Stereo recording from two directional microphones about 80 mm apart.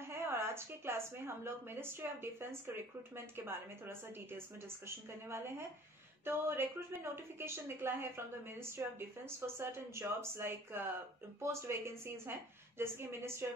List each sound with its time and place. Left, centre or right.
0.0 s a woman's voice: right
3.3 s a woman's voice: right
6.2 s a woman's voice: right